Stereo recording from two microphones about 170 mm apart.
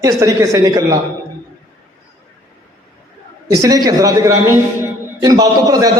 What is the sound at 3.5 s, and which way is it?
A man's voice, 20° right (ahead or behind).